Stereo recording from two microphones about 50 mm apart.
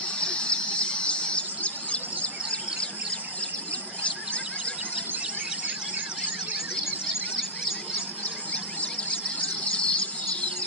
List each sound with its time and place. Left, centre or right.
0.2 s bird: left
9.7 s squeal: left